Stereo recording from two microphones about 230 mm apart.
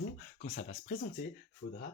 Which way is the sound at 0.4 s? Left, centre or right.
Left.